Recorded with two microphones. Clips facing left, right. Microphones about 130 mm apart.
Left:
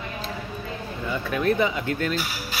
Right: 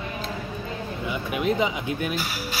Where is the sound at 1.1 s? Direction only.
15° right (ahead or behind).